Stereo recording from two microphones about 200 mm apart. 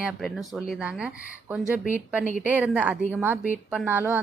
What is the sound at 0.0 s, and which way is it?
A woman's voice, centre (ahead or behind).